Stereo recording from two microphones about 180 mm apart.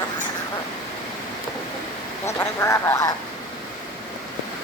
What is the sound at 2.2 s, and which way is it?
Speech, 15° left (ahead or behind).